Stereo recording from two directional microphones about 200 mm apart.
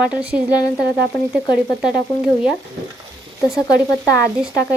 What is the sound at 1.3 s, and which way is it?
Frying, centre (ahead or behind).